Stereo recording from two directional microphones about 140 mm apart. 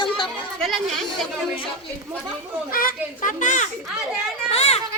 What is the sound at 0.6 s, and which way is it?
Speech, centre (ahead or behind).